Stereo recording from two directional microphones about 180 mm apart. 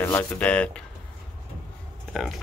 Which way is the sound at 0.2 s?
5° left (ahead or behind).